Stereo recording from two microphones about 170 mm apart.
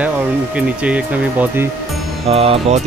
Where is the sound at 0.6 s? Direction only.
5° right (ahead or behind).